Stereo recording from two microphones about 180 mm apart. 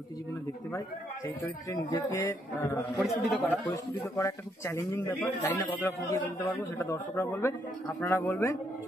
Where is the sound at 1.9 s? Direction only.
15° left (ahead or behind).